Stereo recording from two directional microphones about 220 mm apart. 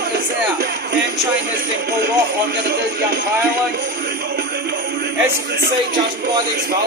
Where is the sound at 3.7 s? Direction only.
45° right (ahead or behind).